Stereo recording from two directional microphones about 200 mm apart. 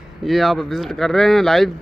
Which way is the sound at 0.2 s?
Centre (ahead or behind).